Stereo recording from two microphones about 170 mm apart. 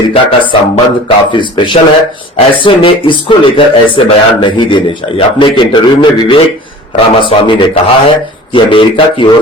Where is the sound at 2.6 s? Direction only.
30° left (ahead or behind).